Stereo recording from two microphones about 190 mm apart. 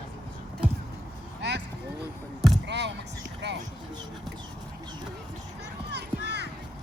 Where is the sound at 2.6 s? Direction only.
65° right (ahead or behind).